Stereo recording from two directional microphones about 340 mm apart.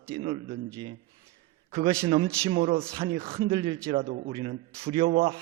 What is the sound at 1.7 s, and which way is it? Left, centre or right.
A man's voice, centre.